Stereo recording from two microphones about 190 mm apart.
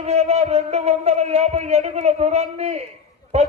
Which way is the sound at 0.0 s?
35° right (ahead or behind).